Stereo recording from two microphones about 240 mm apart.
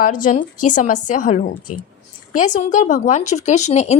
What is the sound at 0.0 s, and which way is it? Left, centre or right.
Speech, left.